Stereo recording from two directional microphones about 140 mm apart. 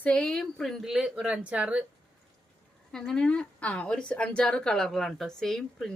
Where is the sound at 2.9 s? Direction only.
5° left (ahead or behind).